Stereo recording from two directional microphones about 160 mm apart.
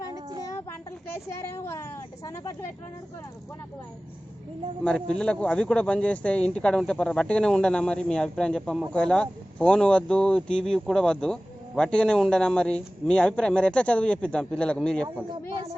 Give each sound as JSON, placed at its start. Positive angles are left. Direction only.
{"t": 0.1, "sound": "child singing", "side_deg": -25}
{"t": 1.1, "sound": "a woman's voice", "side_deg": 15}
{"t": 4.8, "sound": "speech", "side_deg": 5}